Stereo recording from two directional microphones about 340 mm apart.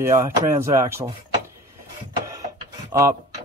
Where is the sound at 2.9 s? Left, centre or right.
Centre.